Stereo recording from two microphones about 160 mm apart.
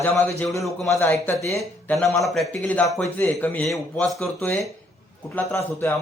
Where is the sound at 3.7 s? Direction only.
5° left (ahead or behind).